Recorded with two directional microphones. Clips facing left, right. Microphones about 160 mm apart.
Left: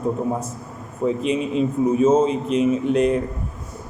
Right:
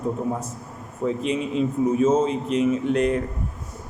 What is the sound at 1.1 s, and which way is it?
A man's voice, 20° left (ahead or behind).